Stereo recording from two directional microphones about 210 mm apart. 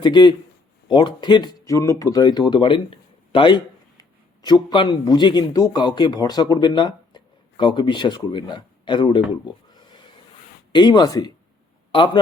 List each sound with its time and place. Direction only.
0.0 s a man's voice: 20° left (ahead or behind)
10.7 s a man's voice: 20° left (ahead or behind)